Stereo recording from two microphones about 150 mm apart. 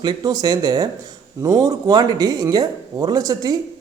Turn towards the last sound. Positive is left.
turn(degrees=-25)  # may be behind; listen again after turning